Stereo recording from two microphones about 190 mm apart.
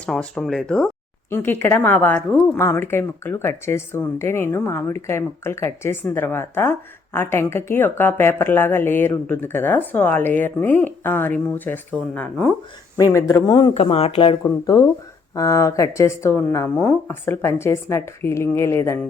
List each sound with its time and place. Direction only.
0.0 s a woman's voice: 5° left (ahead or behind)
13.7 s a woman's voice: 30° left (ahead or behind); by 18.9 s 15° left (ahead or behind)